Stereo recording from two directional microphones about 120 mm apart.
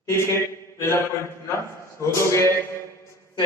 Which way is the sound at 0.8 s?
25° left (ahead or behind).